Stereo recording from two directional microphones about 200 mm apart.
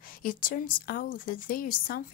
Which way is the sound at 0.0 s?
45° left (ahead or behind).